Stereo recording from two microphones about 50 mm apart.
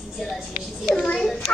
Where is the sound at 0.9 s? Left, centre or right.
Centre.